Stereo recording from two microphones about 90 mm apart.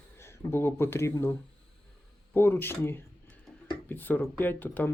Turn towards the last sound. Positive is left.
turn(degrees=20)  # may be behind; listen again after turning